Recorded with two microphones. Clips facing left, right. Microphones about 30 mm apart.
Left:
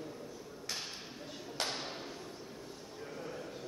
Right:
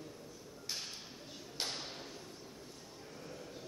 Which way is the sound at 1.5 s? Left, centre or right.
Centre.